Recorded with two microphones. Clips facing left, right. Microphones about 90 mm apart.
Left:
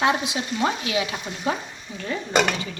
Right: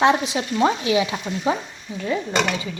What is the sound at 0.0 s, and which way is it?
A woman's voice, 30° right (ahead or behind).